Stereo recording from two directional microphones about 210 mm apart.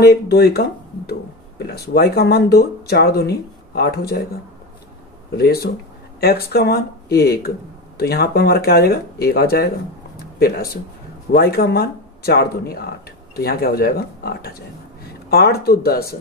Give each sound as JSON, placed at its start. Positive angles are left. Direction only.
{"t": 0.0, "sound": "speech", "side_deg": 50}
{"t": 5.4, "sound": "speech", "side_deg": 50}
{"t": 10.1, "sound": "a sound", "side_deg": 45}
{"t": 11.3, "sound": "speech", "side_deg": 50}